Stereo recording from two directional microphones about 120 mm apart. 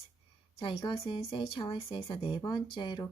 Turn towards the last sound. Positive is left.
turn(degrees=40)  # may be behind; listen again after turning